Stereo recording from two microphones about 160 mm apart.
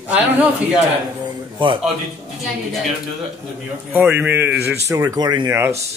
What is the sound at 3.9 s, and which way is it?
Speech, 10° right (ahead or behind).